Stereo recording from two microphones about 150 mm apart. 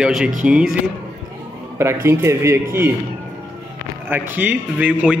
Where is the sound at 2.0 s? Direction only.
15° right (ahead or behind).